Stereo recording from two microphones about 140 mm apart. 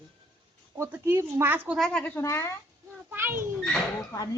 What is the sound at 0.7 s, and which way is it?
Speech, 15° right (ahead or behind).